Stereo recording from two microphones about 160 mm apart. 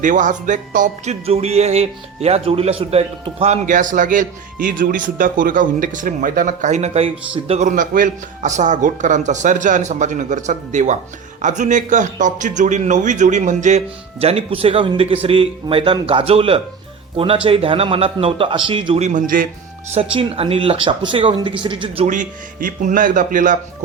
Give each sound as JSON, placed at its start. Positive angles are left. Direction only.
{"t": 0.0, "sound": "a man's voice", "side_deg": -55}
{"t": 1.2, "sound": "a man's voice", "side_deg": -40}
{"t": 19.0, "sound": "speech", "side_deg": -55}
{"t": 19.9, "sound": "speech", "side_deg": -35}
{"t": 22.0, "sound": "a man's voice", "side_deg": -55}